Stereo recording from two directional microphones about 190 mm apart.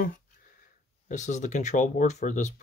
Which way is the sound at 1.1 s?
40° left (ahead or behind).